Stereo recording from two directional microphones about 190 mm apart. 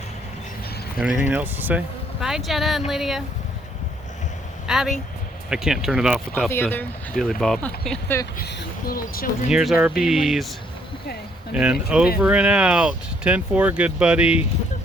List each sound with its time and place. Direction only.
0.9 s speech: 5° right (ahead or behind)
4.6 s speech: centre (ahead or behind)
6.3 s speech: 10° left (ahead or behind)
8.4 s speech: 55° left (ahead or behind)
9.5 s speech: 5° right (ahead or behind)
11.5 s speech: 5° right (ahead or behind)